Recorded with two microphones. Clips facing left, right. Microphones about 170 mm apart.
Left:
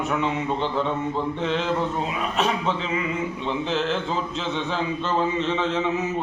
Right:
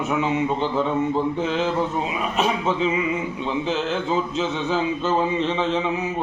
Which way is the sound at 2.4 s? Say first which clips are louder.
Right 3 dB; 5° right (ahead or behind).